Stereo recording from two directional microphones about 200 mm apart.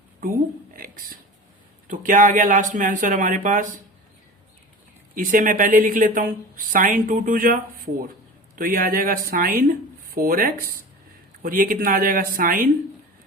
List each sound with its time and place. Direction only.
0.7 s a sound: 45° right (ahead or behind)
1.9 s speech: 40° right (ahead or behind)
5.1 s speech: 40° right (ahead or behind)